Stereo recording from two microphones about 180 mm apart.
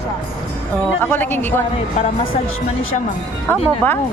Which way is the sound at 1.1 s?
10° left (ahead or behind).